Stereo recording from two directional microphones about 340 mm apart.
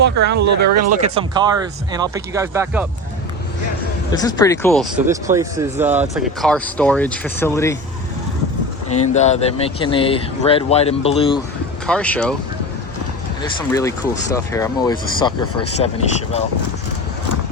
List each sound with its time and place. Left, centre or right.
0.0 s speech: right
0.3 s speech: right
1.0 s speech: centre
4.1 s speech: centre
8.9 s speech: centre
11.9 s speech: centre
13.4 s speech: centre